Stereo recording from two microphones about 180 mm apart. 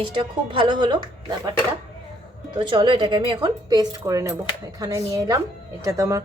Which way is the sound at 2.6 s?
25° right (ahead or behind).